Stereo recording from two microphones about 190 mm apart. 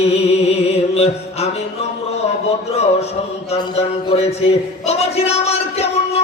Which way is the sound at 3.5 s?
35° left (ahead or behind).